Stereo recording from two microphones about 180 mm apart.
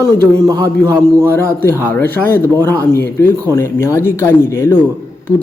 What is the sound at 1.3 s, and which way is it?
A man's voice, 15° left (ahead or behind).